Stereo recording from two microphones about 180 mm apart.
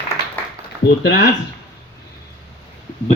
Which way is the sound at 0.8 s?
65° left (ahead or behind).